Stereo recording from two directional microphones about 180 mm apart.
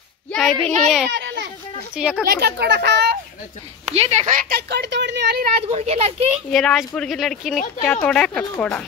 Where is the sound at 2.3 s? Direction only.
65° right (ahead or behind).